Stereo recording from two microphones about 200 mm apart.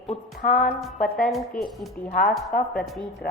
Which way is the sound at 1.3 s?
Centre (ahead or behind).